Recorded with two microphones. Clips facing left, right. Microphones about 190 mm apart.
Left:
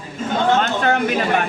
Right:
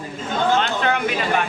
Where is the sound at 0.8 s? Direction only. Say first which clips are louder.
Left 3 dB; 45° left (ahead or behind).